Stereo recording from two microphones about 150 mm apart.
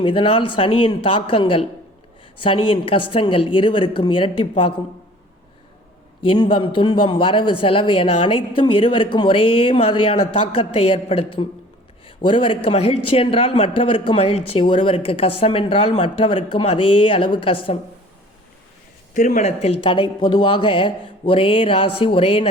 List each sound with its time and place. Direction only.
0.0 s a man's voice: 35° left (ahead or behind)
6.2 s a man's voice: 35° left (ahead or behind)
19.1 s a man's voice: 55° left (ahead or behind); by 22.4 s 40° left (ahead or behind)